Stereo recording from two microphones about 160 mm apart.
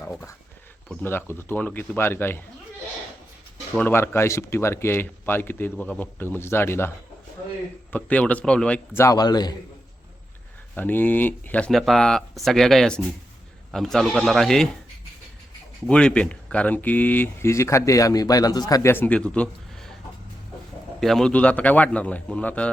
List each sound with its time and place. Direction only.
0.0 s speech: 15° left (ahead or behind)
3.8 s speech: 15° left (ahead or behind)
7.9 s speech: 10° left (ahead or behind); by 9.6 s 25° left (ahead or behind)
10.8 s speech: 10° left (ahead or behind)
15.9 s speech: 5° left (ahead or behind)
21.0 s speech: centre (ahead or behind)